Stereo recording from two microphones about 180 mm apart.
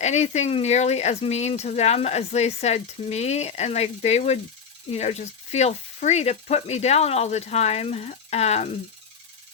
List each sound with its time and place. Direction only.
0.0 s speech: 40° left (ahead or behind)